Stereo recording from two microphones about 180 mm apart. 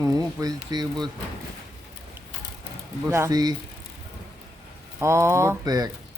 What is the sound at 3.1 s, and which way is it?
Speech, 15° right (ahead or behind).